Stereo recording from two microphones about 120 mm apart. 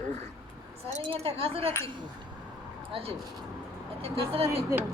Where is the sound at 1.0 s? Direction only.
50° right (ahead or behind).